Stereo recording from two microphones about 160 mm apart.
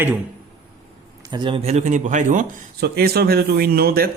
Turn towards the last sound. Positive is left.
turn(degrees=-70)  # may be behind; listen again after turning